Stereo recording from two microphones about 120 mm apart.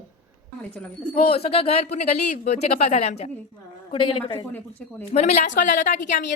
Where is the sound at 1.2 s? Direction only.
55° left (ahead or behind).